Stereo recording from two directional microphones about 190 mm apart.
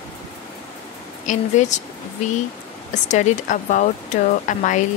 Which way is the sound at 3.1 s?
40° left (ahead or behind).